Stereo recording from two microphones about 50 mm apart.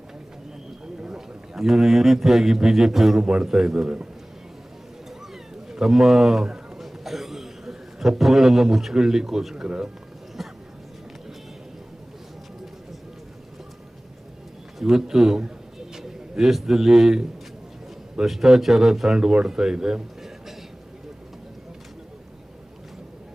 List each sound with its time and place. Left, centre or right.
1.0 s a sound: centre
1.5 s a man's voice: centre
5.3 s cat: centre
6.8 s a man's voice: centre
10.4 s music: centre
14.8 s a man's voice: centre
18.3 s speech: centre